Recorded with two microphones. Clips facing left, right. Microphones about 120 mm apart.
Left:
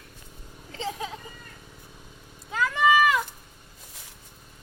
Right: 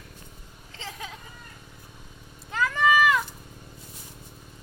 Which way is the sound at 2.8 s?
15° left (ahead or behind).